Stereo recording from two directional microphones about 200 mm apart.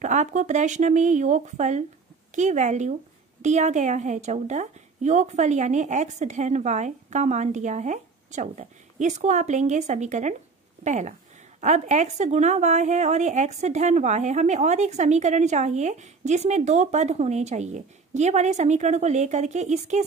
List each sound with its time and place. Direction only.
0.0 s speech: 35° right (ahead or behind)